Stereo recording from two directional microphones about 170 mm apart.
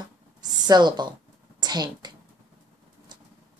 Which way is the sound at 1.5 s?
25° right (ahead or behind).